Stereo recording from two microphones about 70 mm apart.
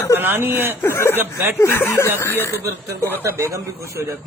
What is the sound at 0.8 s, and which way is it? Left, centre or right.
Speech, left.